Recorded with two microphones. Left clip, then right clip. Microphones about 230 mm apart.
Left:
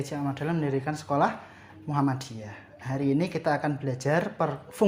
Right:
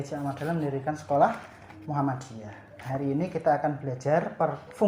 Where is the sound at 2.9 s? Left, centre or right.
Left.